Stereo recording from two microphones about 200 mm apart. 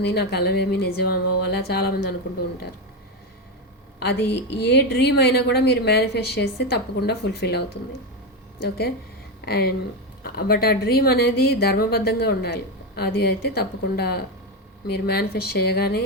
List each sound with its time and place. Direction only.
0.0 s a woman's voice: 55° left (ahead or behind)
4.0 s a woman's voice: 55° left (ahead or behind)
9.4 s a woman's voice: 50° left (ahead or behind)